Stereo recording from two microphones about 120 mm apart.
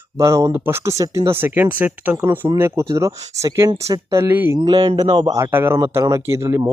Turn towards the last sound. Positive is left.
turn(degrees=-25)  # may be behind; listen again after turning